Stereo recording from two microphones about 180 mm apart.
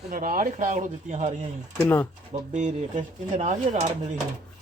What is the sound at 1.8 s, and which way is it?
Speech, 10° left (ahead or behind).